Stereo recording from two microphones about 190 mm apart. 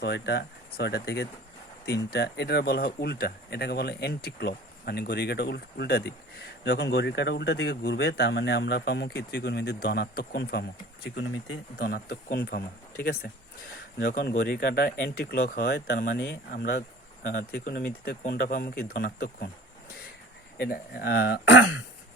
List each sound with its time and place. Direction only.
0.0 s speech: 65° left (ahead or behind)
11.8 s speech: 50° left (ahead or behind)
20.6 s speech: 55° left (ahead or behind); by 21.8 s 75° left (ahead or behind)